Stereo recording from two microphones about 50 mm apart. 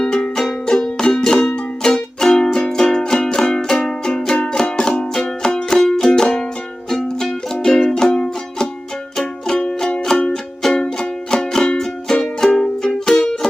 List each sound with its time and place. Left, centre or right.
0.0 s music: centre
10.6 s music: centre